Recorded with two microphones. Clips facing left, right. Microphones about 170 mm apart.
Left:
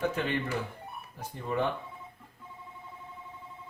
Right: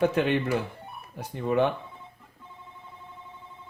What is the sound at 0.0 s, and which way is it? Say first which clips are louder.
Speech: right 7 dB; 75° right (ahead or behind).